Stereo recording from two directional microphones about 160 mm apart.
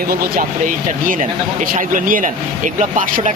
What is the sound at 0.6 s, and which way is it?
Speech, 55° right (ahead or behind).